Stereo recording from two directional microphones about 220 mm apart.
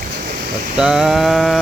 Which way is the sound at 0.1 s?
45° right (ahead or behind).